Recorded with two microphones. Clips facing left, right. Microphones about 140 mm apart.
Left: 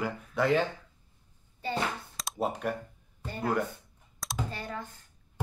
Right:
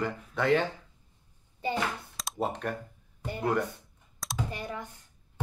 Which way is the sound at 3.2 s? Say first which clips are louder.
Right 1 dB; 15° right (ahead or behind).